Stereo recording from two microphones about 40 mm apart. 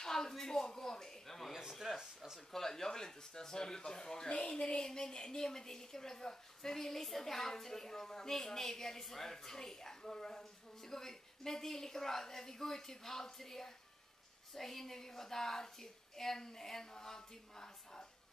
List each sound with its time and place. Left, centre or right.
0.0 s a woman's voice: centre
1.5 s speech: centre
2.5 s a woman's voice: centre
4.3 s a woman's voice: left